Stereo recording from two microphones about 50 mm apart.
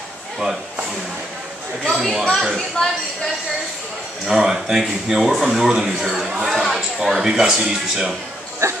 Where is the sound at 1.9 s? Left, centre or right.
Centre.